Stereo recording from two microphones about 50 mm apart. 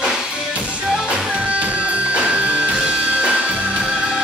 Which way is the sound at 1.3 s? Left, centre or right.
Right.